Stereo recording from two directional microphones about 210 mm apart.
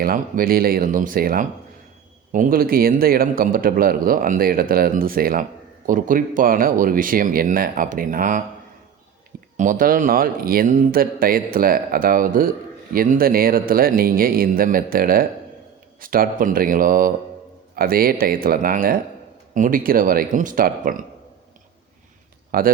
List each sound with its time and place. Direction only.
0.0 s speech: 45° right (ahead or behind)
9.6 s speech: 40° right (ahead or behind)
22.5 s speech: 45° right (ahead or behind)